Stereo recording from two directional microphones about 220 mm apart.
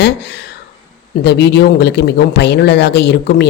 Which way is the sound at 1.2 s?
50° left (ahead or behind).